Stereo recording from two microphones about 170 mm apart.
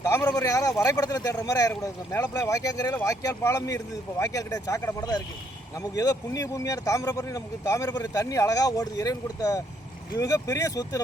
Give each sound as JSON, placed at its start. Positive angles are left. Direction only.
{"t": 0.0, "sound": "speech", "side_deg": 15}